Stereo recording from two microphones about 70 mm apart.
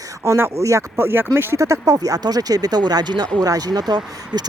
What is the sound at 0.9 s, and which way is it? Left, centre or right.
Speech, right.